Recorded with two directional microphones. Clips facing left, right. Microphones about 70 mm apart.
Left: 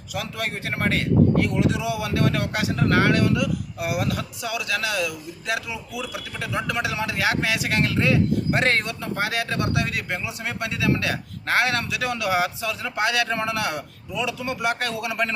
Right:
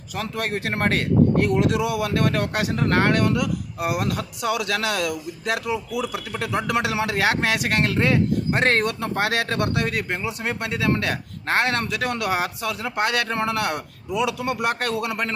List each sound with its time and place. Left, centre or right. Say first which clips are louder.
0.3 s a man's voice: right 5 dB; right
5.6 s a man's voice: right 6 dB; right
6.7 s a man's voice: right 3 dB; right
7.9 s speech: right 1 dB; right
11.4 s a man's voice: even; right